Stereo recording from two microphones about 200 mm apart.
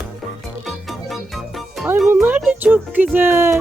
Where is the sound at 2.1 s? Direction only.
5° right (ahead or behind).